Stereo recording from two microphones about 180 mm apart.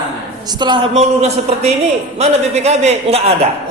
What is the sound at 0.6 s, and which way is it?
Speech, 25° right (ahead or behind).